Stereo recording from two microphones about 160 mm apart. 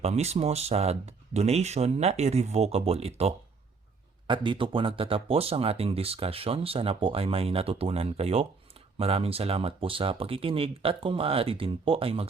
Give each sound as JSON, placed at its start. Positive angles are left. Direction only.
{"t": 0.0, "sound": "speech", "side_deg": -40}